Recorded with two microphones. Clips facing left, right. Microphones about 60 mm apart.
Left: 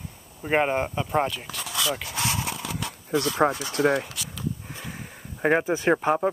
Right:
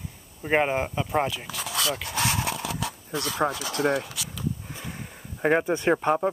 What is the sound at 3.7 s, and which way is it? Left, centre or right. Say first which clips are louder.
Speech: left 2 dB; left.